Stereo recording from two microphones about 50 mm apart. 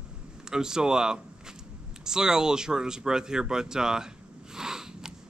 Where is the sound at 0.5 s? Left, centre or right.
Centre.